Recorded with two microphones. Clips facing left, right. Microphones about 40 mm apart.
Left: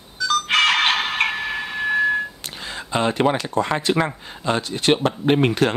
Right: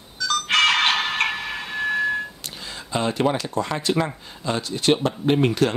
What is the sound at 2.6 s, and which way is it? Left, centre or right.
Speech, left.